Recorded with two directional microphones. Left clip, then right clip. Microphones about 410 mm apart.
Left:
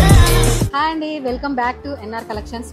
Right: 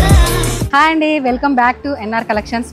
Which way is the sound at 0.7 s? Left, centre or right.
Right.